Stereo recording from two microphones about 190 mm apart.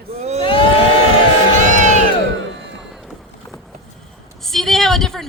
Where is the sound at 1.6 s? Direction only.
40° right (ahead or behind).